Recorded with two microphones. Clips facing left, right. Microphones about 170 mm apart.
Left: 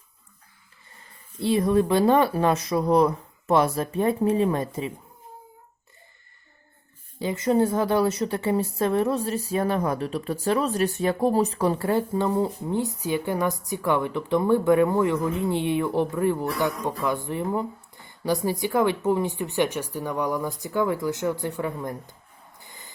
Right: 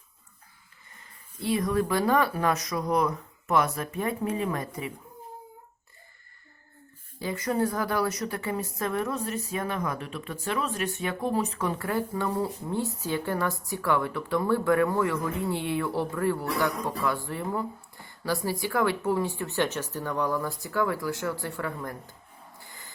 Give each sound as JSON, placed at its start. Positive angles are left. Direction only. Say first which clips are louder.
{"t": 1.4, "sound": "a woman's voice", "louder": "left 5 dB", "side_deg": 25}
{"t": 7.2, "sound": "a woman's voice", "louder": "left 6 dB", "side_deg": 25}
{"t": 22.5, "sound": "rub", "louder": "left 3 dB", "side_deg": 20}